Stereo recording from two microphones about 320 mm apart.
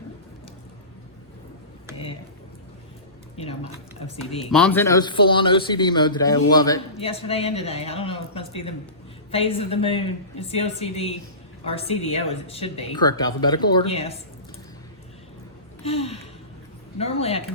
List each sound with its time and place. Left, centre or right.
4.5 s a man's voice: centre
15.8 s speech: centre